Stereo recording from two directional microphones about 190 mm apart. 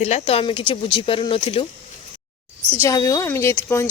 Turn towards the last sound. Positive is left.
turn(degrees=15)  # may be behind; listen again after turning